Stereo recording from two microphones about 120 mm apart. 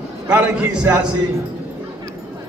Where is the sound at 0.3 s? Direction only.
20° right (ahead or behind).